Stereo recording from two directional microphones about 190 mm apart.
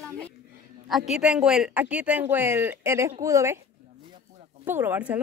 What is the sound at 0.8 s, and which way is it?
Speech, centre (ahead or behind).